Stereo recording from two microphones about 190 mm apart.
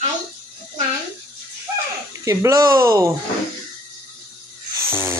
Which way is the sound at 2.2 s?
15° right (ahead or behind).